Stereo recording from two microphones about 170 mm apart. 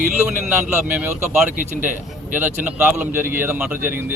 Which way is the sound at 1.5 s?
50° right (ahead or behind).